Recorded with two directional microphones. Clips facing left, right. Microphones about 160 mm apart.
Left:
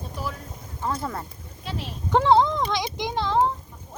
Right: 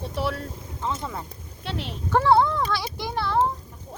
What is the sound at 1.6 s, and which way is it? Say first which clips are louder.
Speech: right 2 dB; 65° right (ahead or behind).